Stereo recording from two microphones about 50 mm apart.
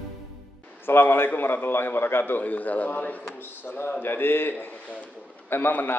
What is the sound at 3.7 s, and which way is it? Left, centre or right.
A man's voice, left.